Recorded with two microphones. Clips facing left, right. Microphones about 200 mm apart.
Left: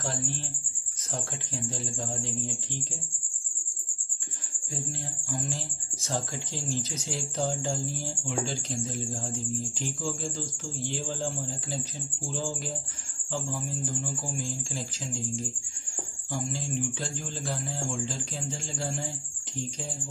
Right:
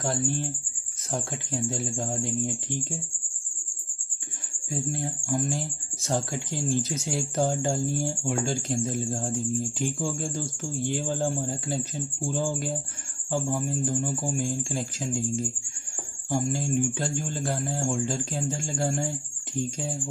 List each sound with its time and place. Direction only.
1.1 s speech: 60° right (ahead or behind)
4.6 s speech: 55° right (ahead or behind)